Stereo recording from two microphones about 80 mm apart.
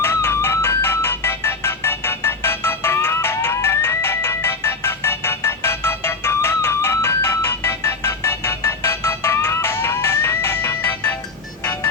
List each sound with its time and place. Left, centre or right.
0.0 s music: left